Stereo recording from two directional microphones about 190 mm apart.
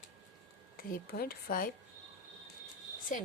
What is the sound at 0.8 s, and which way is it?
Speech, 50° left (ahead or behind).